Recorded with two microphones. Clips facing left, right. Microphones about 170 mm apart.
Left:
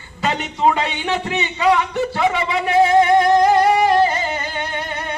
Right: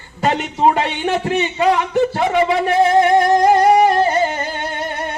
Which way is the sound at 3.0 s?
45° right (ahead or behind).